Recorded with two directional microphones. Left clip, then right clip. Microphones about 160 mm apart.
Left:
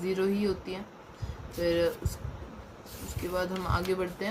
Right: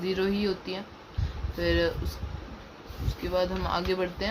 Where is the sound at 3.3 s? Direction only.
45° right (ahead or behind).